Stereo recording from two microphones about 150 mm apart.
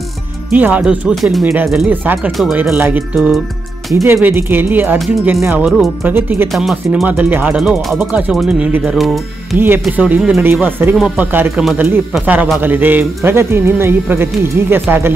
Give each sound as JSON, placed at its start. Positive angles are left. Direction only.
{"t": 0.5, "sound": "speech", "side_deg": -10}
{"t": 6.5, "sound": "speech", "side_deg": -5}
{"t": 9.6, "sound": "speech", "side_deg": -15}